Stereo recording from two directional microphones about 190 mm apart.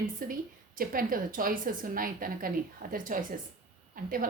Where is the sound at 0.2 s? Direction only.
45° right (ahead or behind).